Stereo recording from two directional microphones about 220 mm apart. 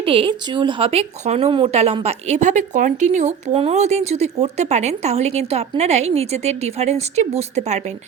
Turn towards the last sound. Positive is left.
turn(degrees=-30)  # may be behind; listen again after turning